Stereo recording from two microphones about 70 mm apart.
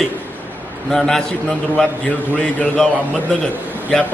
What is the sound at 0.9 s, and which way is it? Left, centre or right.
A man's voice, centre.